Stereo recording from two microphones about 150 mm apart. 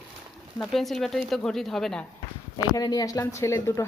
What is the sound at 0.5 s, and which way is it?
Speech, centre (ahead or behind).